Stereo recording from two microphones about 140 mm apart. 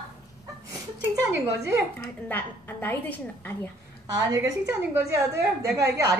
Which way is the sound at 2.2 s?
15° left (ahead or behind).